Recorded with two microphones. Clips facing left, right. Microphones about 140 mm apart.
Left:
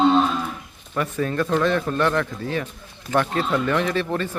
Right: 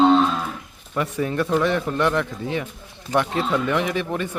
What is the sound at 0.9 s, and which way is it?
Speech, 15° right (ahead or behind).